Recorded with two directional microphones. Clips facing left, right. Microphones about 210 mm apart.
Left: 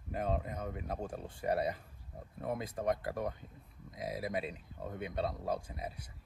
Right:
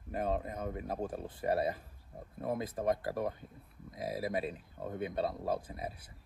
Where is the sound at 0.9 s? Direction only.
Centre (ahead or behind).